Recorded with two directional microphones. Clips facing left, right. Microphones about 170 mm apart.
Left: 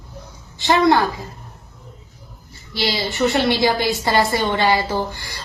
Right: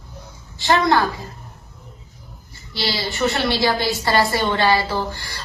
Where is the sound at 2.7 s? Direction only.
20° left (ahead or behind).